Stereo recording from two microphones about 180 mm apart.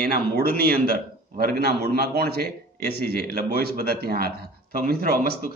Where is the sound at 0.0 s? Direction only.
55° right (ahead or behind).